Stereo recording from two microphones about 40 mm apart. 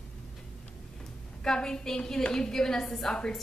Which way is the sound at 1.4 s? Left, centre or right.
Centre.